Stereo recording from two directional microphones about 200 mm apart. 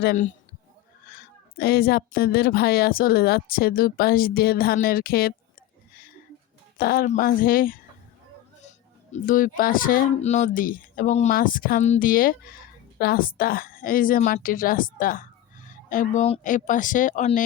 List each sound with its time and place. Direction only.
0.0 s a woman's voice: 55° left (ahead or behind)
1.5 s a woman's voice: 50° left (ahead or behind)
6.7 s a woman's voice: 45° left (ahead or behind)
9.1 s a woman's voice: 40° left (ahead or behind)